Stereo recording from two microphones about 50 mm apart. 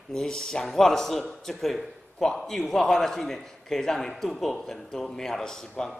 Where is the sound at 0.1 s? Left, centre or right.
Centre.